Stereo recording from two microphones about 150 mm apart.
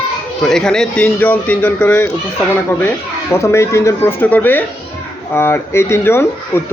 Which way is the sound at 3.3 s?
20° left (ahead or behind).